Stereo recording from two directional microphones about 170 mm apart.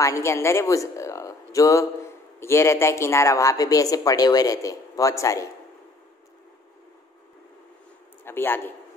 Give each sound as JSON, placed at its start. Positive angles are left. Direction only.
{"t": 0.0, "sound": "speech", "side_deg": 15}
{"t": 8.2, "sound": "a man's voice", "side_deg": 15}